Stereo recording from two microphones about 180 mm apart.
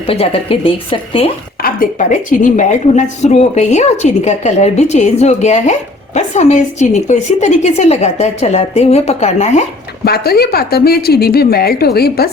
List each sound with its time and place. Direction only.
0.1 s a woman's voice: 30° left (ahead or behind)
1.6 s a woman's voice: 50° left (ahead or behind)
10.0 s a woman's voice: 60° left (ahead or behind)